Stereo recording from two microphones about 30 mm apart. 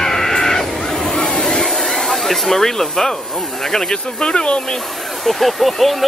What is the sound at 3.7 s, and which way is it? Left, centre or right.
Speech, left.